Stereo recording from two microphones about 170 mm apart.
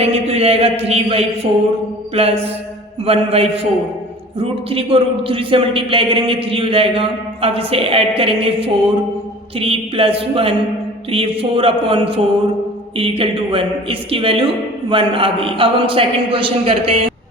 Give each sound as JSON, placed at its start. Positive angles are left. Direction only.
{"t": 0.0, "sound": "a man's voice", "side_deg": -35}